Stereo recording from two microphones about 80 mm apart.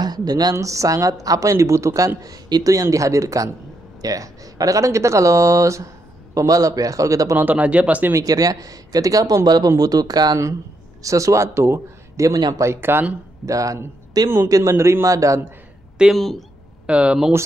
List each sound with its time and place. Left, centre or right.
0.0 s speech: right
0.6 s a woman's voice: right
7.3 s speech: right
8.1 s a woman's voice: right
11.0 s speech: right
12.3 s speech: right
12.5 s speech: right
13.5 s a woman's voice: right
16.0 s speech: centre
16.8 s speech: centre